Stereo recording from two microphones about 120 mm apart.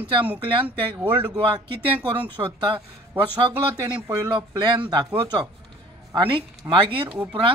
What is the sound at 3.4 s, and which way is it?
A woman's voice, 30° right (ahead or behind).